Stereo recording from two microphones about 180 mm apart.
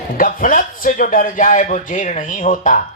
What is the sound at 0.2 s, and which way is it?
Speech, 50° left (ahead or behind).